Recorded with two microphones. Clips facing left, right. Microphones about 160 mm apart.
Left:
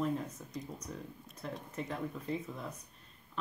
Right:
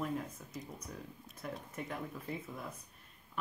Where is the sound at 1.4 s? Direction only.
5° right (ahead or behind).